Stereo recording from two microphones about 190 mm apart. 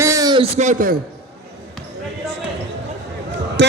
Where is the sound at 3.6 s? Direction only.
70° right (ahead or behind).